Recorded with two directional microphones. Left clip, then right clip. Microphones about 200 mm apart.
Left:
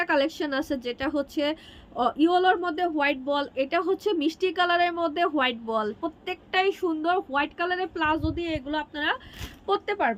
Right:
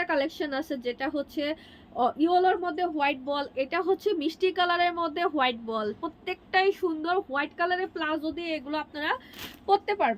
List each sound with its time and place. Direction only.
0.0 s speech: 25° left (ahead or behind)